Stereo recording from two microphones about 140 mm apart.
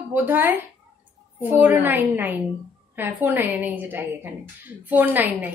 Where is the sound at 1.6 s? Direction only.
15° right (ahead or behind).